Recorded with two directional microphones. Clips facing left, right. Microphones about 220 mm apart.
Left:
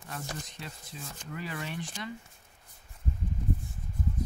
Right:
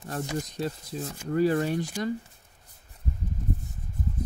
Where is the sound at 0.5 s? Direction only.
40° right (ahead or behind).